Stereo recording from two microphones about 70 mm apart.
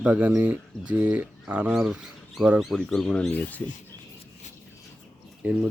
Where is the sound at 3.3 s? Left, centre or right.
Left.